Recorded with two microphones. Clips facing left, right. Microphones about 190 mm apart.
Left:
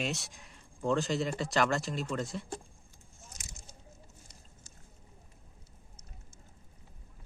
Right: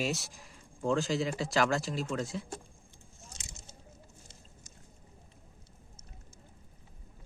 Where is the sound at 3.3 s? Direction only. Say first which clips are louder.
Even; 25° right (ahead or behind).